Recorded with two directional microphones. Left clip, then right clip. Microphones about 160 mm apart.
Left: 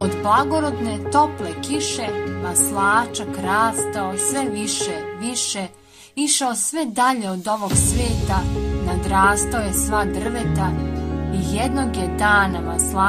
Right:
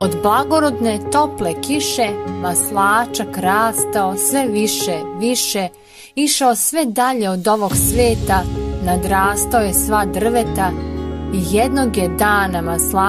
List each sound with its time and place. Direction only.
0.2 s music: 55° right (ahead or behind)
11.5 s music: 45° right (ahead or behind)